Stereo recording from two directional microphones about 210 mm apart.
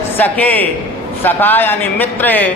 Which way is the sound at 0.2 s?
10° left (ahead or behind).